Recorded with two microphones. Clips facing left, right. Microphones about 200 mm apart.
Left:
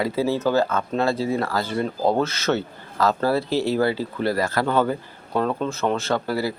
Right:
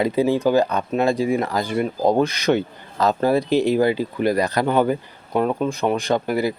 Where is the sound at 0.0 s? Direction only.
15° right (ahead or behind).